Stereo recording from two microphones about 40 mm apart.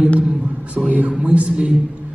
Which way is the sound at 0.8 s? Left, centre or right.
Right.